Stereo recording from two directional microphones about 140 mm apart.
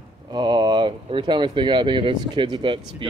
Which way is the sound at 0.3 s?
35° right (ahead or behind).